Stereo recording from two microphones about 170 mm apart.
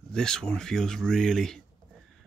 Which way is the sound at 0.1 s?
5° left (ahead or behind).